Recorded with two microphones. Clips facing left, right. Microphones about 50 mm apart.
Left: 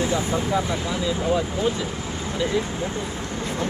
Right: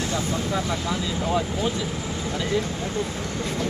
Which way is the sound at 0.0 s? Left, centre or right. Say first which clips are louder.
Left 3 dB; centre.